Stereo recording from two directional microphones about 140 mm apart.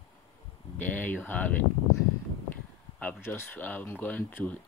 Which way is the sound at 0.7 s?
10° left (ahead or behind).